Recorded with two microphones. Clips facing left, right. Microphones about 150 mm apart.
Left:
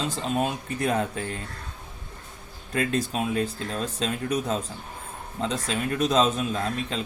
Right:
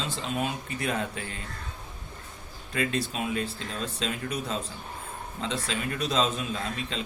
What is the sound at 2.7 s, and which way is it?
A man's voice, 45° left (ahead or behind).